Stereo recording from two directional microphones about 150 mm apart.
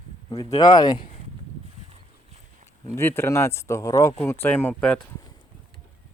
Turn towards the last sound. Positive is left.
turn(degrees=10)  # may be behind; listen again after turning